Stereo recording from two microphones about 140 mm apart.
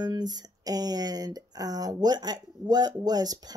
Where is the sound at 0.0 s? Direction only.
30° right (ahead or behind).